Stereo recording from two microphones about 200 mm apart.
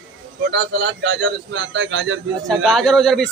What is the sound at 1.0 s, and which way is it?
A man's voice, 60° right (ahead or behind).